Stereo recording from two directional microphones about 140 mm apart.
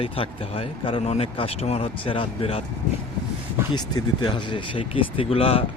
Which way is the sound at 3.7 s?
30° left (ahead or behind).